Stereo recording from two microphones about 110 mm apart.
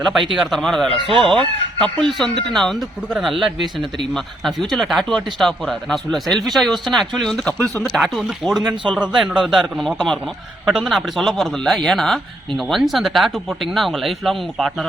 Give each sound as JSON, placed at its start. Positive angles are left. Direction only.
{"t": 0.0, "sound": "a man's voice", "side_deg": 0}
{"t": 8.7, "sound": "a man's voice", "side_deg": -45}
{"t": 9.0, "sound": "a man's voice", "side_deg": -5}